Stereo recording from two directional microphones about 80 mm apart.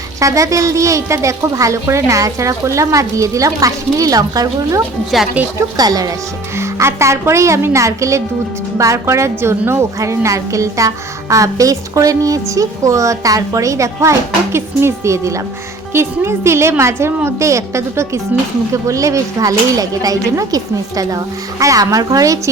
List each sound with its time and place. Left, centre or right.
0.2 s a woman's voice: right
6.6 s a woman's voice: right